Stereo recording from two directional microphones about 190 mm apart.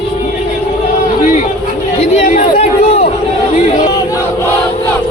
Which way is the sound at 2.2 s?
40° left (ahead or behind).